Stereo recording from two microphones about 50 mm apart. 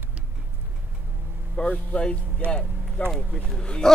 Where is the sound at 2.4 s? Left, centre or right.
Right.